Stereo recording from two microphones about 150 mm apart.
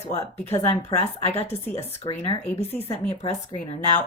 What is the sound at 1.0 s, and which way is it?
A woman's voice, 45° left (ahead or behind).